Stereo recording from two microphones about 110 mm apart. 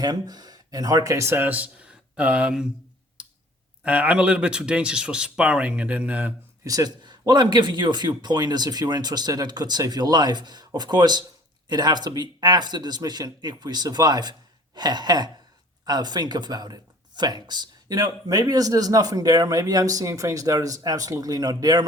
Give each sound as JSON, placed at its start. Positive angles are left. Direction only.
{"t": 0.0, "sound": "speech", "side_deg": -35}
{"t": 3.2, "sound": "clicking", "side_deg": -10}
{"t": 3.8, "sound": "speech", "side_deg": -10}
{"t": 6.7, "sound": "speech", "side_deg": -35}